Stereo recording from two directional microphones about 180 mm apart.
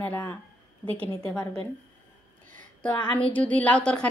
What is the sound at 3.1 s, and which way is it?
Speech, 5° left (ahead or behind).